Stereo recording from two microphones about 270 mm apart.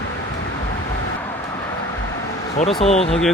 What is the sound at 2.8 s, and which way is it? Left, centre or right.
Speech, left.